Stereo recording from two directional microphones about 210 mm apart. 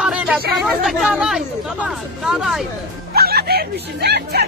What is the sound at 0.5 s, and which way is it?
Speech, centre (ahead or behind).